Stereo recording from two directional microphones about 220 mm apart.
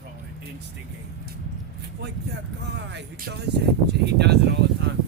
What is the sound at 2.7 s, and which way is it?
Speech, 50° right (ahead or behind).